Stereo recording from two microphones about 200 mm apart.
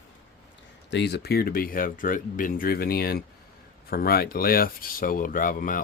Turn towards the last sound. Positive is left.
turn(degrees=45)  # may be behind; listen again after turning